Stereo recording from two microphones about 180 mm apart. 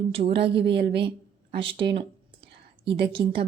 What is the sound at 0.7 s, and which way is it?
Speech, 70° right (ahead or behind).